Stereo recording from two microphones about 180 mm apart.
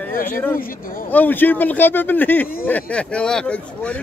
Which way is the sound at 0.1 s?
50° left (ahead or behind).